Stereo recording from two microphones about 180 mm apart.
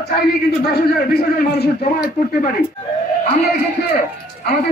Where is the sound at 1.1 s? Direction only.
60° left (ahead or behind).